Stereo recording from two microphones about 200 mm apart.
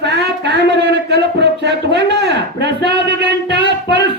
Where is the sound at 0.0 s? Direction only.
60° right (ahead or behind).